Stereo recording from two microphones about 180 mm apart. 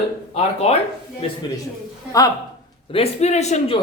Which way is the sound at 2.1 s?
20° left (ahead or behind).